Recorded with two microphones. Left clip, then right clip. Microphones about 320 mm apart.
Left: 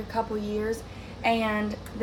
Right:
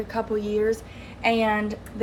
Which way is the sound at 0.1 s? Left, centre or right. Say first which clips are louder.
Right 2 dB; right.